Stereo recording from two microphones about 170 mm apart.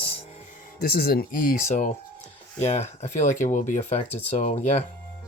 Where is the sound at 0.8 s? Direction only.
65° left (ahead or behind); by 4.8 s 40° left (ahead or behind).